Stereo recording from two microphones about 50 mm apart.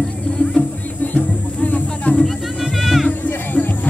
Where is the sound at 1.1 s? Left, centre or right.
Left.